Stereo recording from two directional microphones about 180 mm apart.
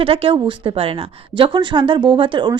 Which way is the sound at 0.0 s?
30° right (ahead or behind).